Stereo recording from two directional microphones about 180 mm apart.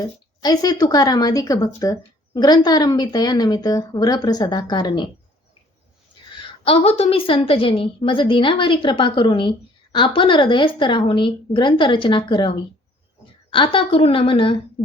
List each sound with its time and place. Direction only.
0.4 s a woman's voice: 20° left (ahead or behind)
6.7 s a woman's voice: 30° left (ahead or behind)